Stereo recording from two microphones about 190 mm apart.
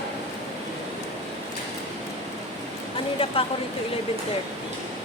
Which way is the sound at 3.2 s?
30° left (ahead or behind).